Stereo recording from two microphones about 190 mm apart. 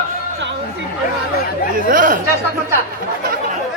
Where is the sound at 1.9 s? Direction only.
45° right (ahead or behind).